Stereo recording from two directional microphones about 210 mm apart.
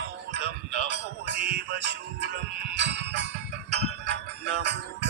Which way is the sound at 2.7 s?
55° right (ahead or behind).